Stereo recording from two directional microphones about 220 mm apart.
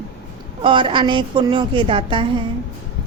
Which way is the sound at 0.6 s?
25° right (ahead or behind).